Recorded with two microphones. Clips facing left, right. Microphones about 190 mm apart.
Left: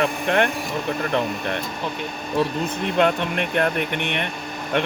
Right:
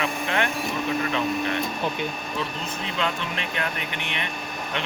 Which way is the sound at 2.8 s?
55° left (ahead or behind).